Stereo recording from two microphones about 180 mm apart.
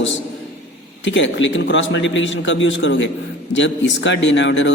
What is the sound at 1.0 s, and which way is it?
A man's voice, 90° left.